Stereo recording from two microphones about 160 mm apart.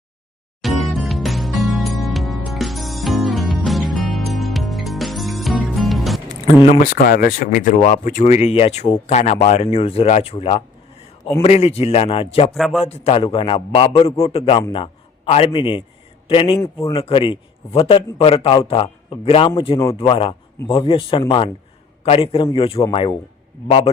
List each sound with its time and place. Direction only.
0.6 s music: centre (ahead or behind)
6.7 s a man's voice: 60° left (ahead or behind); by 12.5 s 35° left (ahead or behind)
12.5 s a man's voice: centre (ahead or behind)
12.8 s a man's voice: 40° left (ahead or behind)